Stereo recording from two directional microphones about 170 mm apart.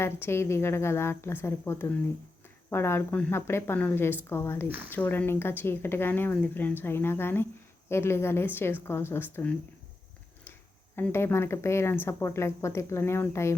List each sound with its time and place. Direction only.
0.0 s a woman's voice: 15° left (ahead or behind)
10.9 s a woman's voice: 15° left (ahead or behind)